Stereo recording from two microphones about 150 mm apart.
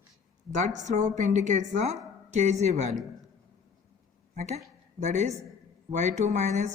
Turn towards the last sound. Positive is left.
turn(degrees=-55)  # may be behind; listen again after turning